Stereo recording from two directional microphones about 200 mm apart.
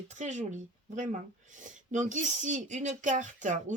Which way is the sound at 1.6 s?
40° right (ahead or behind).